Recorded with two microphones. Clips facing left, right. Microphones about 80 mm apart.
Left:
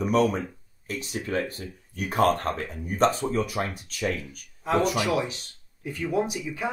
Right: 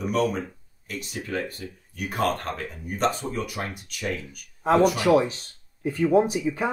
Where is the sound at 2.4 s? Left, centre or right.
Left.